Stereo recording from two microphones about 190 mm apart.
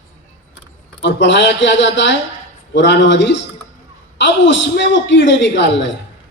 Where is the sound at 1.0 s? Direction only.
70° left (ahead or behind).